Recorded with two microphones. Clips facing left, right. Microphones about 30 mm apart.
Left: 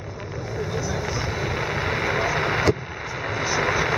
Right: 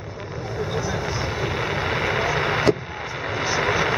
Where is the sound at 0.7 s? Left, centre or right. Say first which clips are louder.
Right 1 dB; centre.